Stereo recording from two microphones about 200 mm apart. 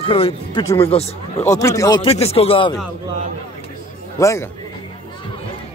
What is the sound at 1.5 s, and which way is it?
Speech, 15° left (ahead or behind).